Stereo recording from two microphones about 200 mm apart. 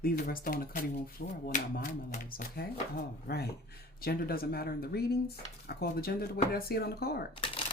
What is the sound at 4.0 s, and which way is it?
Speech, 50° left (ahead or behind).